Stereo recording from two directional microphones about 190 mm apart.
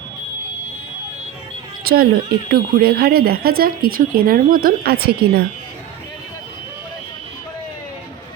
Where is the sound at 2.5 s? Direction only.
55° right (ahead or behind).